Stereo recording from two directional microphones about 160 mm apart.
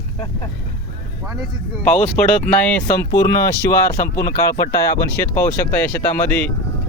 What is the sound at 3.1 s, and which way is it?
Speech, 20° left (ahead or behind).